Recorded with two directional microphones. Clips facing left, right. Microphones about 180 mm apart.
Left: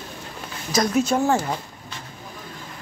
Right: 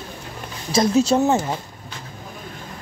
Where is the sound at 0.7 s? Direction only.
25° right (ahead or behind).